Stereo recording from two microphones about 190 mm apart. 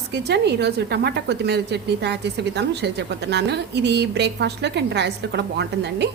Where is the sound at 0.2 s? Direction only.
60° right (ahead or behind).